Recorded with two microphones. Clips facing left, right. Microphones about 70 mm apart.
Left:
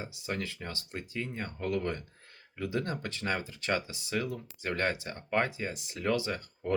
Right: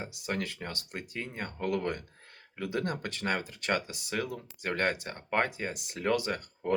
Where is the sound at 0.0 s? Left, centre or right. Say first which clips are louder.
Right 2 dB; right.